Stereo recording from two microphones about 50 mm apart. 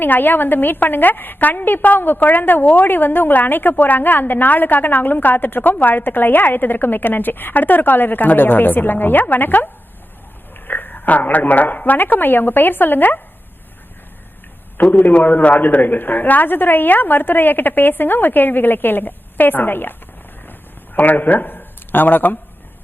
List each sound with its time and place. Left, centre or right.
0.0 s a woman's voice: left
10.7 s a woman's voice: left
14.8 s a woman's voice: left
20.5 s a sound: left